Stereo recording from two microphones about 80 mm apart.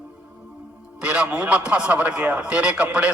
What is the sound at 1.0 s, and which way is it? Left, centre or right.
A man's voice, centre.